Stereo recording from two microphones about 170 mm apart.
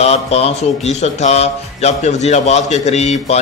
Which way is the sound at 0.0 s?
40° left (ahead or behind).